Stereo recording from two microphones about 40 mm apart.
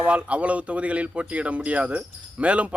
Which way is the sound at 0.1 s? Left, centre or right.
Right.